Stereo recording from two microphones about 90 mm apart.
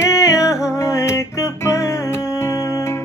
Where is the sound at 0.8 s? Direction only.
30° left (ahead or behind).